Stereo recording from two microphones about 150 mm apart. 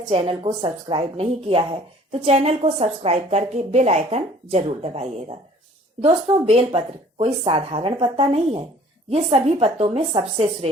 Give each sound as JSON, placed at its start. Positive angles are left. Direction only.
{"t": 0.0, "sound": "a woman's voice", "side_deg": -35}